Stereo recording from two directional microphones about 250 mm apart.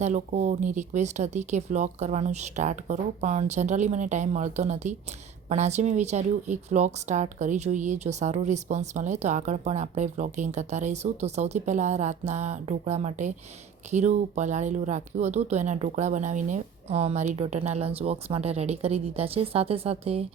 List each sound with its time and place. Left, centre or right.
0.0 s a woman's voice: right